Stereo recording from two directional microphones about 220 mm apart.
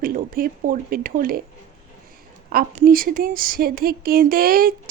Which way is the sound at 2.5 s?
40° right (ahead or behind).